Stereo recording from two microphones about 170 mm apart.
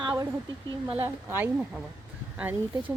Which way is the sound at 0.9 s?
10° right (ahead or behind).